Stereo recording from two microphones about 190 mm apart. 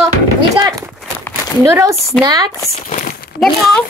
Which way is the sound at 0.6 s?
20° right (ahead or behind).